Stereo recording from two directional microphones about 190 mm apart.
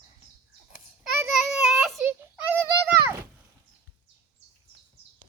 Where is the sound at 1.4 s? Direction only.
Centre (ahead or behind).